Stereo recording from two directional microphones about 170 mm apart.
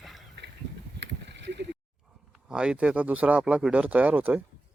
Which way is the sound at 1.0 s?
90° right.